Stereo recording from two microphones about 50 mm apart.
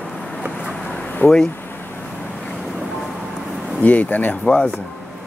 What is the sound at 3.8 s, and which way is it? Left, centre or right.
Speech, left.